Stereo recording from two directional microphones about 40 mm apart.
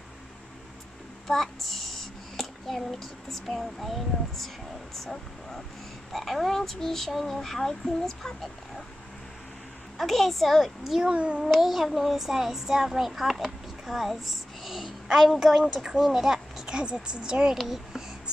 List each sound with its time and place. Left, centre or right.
1.2 s a child's voice: centre
6.1 s frog: centre
9.9 s a child's voice: centre
11.1 s a child's voice: right
11.6 s a child's voice: centre; by 17.6 s right
17.6 s a child's voice: centre